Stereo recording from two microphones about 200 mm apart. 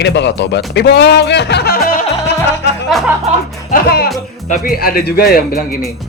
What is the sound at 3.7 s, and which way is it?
Speech, 45° left (ahead or behind).